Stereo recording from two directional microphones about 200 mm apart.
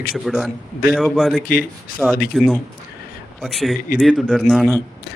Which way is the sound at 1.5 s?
45° left (ahead or behind).